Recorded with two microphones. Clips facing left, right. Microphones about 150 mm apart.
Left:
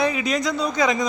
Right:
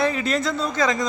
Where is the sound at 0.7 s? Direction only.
20° left (ahead or behind).